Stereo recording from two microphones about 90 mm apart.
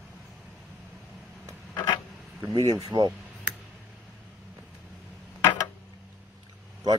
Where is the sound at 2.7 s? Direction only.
50° right (ahead or behind).